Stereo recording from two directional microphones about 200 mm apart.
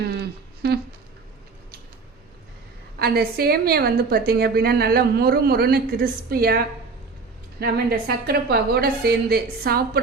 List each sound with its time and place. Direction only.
0.0 s a sound: 55° right (ahead or behind)
3.0 s a woman's voice: 50° right (ahead or behind)
7.6 s a woman's voice: 50° right (ahead or behind)